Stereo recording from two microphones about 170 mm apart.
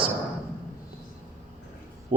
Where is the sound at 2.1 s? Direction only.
45° right (ahead or behind).